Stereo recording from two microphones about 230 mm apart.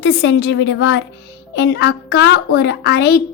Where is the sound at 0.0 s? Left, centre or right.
Left.